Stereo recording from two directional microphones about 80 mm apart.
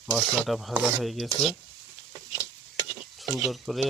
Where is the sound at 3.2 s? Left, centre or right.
Centre.